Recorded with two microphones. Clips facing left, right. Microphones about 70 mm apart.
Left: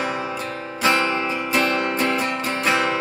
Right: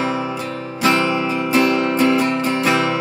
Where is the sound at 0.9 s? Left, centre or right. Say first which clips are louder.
Right 3 dB; centre.